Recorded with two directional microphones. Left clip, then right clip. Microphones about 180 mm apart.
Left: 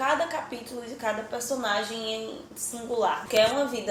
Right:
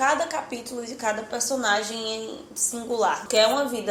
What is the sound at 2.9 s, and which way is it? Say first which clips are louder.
Speech: right 2 dB; 45° right (ahead or behind).